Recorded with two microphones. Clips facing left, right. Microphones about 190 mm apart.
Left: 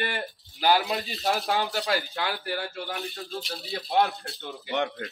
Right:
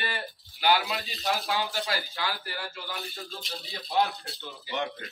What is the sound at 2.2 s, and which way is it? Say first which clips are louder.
Speech: left 4 dB; 60° left (ahead or behind).